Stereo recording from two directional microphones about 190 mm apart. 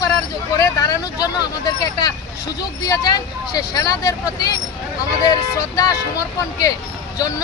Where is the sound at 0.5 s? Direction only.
20° left (ahead or behind).